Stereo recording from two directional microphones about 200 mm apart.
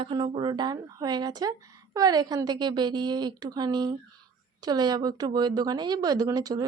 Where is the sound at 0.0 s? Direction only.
25° right (ahead or behind).